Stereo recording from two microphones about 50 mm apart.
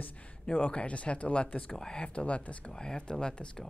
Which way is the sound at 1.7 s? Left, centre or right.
Centre.